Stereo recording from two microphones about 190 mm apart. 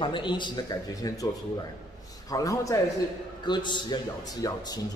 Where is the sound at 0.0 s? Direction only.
25° left (ahead or behind).